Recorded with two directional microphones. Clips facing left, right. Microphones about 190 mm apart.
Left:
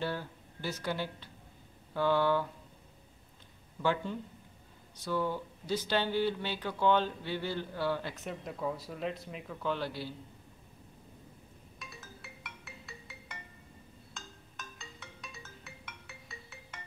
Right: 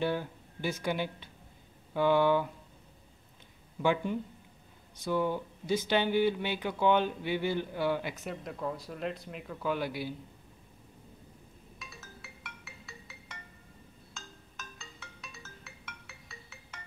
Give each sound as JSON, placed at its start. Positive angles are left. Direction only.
{"t": 0.0, "sound": "speech", "side_deg": -15}
{"t": 3.8, "sound": "speech", "side_deg": -15}
{"t": 8.2, "sound": "speech", "side_deg": 0}
{"t": 11.8, "sound": "music", "side_deg": 0}